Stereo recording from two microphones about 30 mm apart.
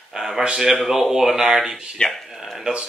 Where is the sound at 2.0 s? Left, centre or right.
Left.